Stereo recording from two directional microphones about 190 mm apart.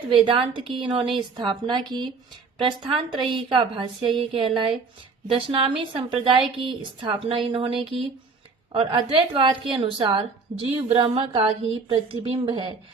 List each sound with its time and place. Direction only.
0.1 s a woman's voice: 25° right (ahead or behind)